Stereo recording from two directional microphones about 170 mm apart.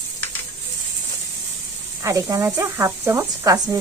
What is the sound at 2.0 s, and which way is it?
Speech, 20° right (ahead or behind).